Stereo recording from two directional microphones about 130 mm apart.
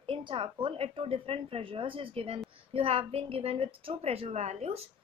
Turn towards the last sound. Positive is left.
turn(degrees=-55)  # may be behind; listen again after turning